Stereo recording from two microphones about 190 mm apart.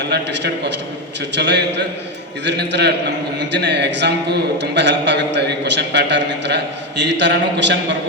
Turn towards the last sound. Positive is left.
turn(degrees=-65)  # may be behind; listen again after turning